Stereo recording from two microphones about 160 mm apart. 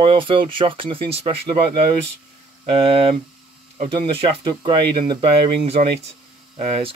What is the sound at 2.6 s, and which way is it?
Speech, 35° right (ahead or behind).